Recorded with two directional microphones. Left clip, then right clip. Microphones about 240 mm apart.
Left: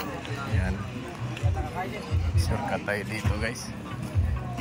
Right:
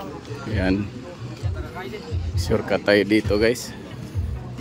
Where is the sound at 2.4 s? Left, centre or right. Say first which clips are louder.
Right 9 dB; right.